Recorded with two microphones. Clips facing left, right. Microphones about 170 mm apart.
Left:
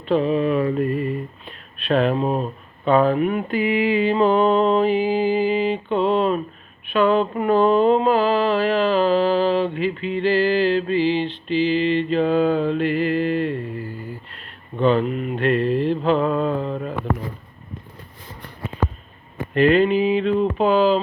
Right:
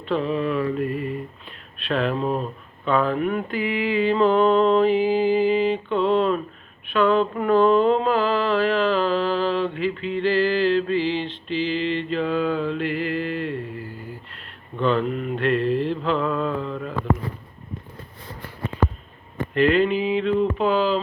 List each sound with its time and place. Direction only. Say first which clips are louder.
0.1 s mantra: left 4 dB; 15° left (ahead or behind)
1.9 s speech: left 4 dB; 20° left (ahead or behind)
6.9 s a sound: left 1 dB; 15° left (ahead or behind)
11.5 s mantra: left 5 dB; 15° left (ahead or behind)
14.8 s mantra: left 3 dB; 15° left (ahead or behind); by 16.9 s 30° left (ahead or behind)
19.7 s speech: left 3 dB; 15° left (ahead or behind)